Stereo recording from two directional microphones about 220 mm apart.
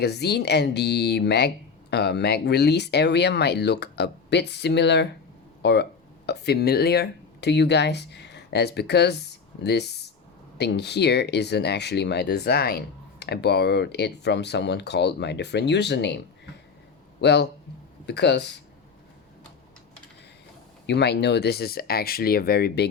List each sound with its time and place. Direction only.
0.0 s speech: 50° left (ahead or behind)
20.8 s speech: 50° left (ahead or behind)